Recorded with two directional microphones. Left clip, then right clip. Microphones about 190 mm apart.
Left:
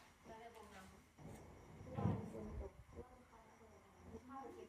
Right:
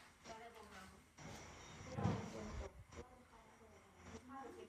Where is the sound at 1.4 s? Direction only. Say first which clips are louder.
Right 4 dB; 30° left (ahead or behind).